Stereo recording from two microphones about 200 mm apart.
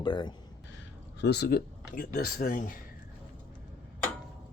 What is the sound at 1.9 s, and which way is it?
Speech, 45° left (ahead or behind).